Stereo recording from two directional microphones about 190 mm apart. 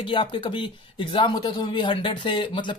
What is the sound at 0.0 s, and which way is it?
Speech, 25° left (ahead or behind).